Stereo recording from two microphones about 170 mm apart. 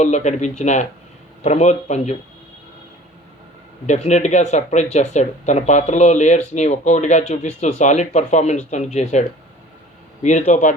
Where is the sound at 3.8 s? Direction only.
45° left (ahead or behind).